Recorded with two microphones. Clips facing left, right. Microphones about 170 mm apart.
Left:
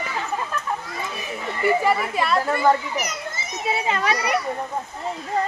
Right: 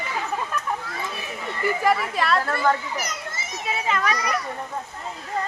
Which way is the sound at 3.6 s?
30° left (ahead or behind).